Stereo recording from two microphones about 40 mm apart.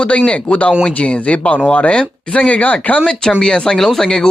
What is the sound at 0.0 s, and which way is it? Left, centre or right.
Speech, left.